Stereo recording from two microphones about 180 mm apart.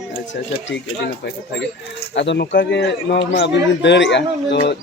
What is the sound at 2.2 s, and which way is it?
A man's voice, 80° left.